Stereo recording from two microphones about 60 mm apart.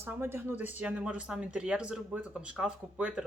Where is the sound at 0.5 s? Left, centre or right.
Right.